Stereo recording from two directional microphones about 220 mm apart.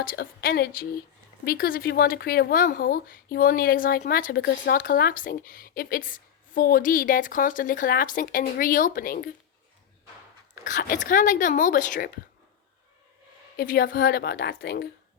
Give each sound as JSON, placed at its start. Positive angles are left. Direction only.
{"t": 0.0, "sound": "speech", "side_deg": 40}
{"t": 10.6, "sound": "speech", "side_deg": 40}
{"t": 13.6, "sound": "a woman's voice", "side_deg": 40}